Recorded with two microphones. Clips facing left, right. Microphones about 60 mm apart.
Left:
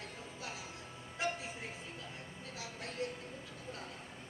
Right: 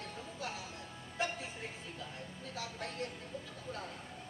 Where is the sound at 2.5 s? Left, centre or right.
Right.